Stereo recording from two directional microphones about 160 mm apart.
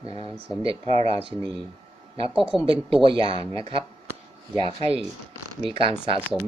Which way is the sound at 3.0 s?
35° right (ahead or behind).